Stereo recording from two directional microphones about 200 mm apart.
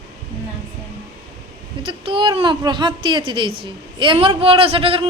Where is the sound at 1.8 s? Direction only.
25° right (ahead or behind).